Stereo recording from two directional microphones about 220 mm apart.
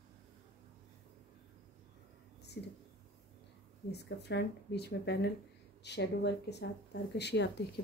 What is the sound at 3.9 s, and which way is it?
Speech, 50° left (ahead or behind).